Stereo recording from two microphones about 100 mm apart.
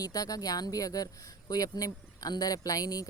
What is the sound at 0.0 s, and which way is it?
Speech, 40° left (ahead or behind).